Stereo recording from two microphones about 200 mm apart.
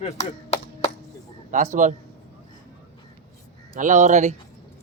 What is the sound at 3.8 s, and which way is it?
Speech, 40° right (ahead or behind).